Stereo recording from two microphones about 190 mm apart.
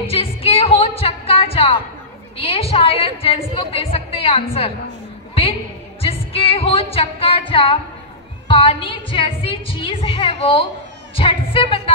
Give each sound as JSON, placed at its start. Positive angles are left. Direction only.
{"t": 0.0, "sound": "a woman's voice", "side_deg": 30}
{"t": 5.3, "sound": "a sound", "side_deg": 30}
{"t": 6.0, "sound": "music", "side_deg": 30}
{"t": 8.5, "sound": "a woman's voice", "side_deg": 25}